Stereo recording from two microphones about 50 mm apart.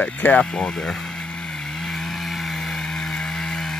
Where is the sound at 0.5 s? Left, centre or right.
Centre.